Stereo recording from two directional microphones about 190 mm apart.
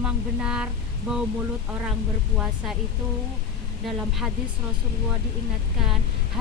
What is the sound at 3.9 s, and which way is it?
Speech, centre (ahead or behind).